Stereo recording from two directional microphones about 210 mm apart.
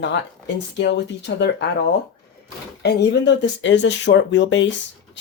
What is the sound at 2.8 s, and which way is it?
Speech, 55° left (ahead or behind).